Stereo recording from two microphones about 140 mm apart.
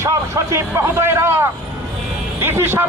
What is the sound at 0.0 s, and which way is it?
A man's voice, 20° right (ahead or behind).